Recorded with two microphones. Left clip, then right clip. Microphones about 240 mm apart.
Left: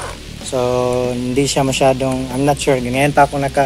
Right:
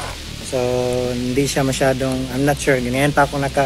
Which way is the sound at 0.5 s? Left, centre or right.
Centre.